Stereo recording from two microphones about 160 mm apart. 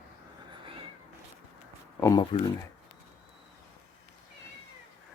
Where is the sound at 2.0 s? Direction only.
20° left (ahead or behind).